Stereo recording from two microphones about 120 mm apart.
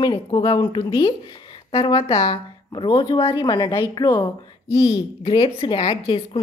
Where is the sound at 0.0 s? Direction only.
40° left (ahead or behind).